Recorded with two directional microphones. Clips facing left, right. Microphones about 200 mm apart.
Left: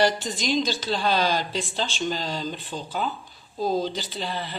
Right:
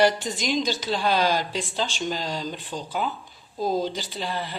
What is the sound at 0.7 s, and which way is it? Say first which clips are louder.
Speech: right 1 dB; 5° right (ahead or behind).